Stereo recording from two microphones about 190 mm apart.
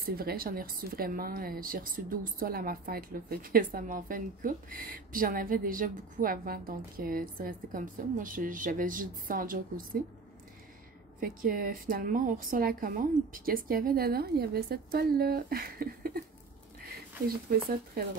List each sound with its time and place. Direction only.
0.0 s a woman's voice: 50° right (ahead or behind)
11.1 s a woman's voice: 50° right (ahead or behind)
17.5 s speech: 55° right (ahead or behind)